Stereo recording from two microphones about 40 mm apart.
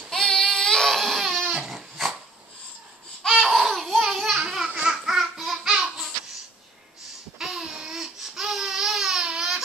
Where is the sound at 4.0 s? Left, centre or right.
Centre.